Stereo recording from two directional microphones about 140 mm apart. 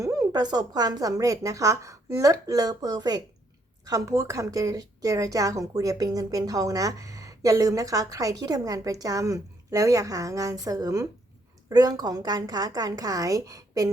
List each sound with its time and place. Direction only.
0.0 s a woman's voice: 25° right (ahead or behind)